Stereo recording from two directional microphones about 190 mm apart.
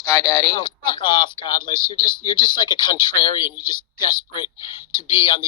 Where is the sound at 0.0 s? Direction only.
15° left (ahead or behind).